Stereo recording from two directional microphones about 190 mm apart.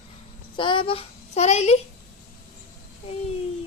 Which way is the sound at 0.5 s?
25° left (ahead or behind).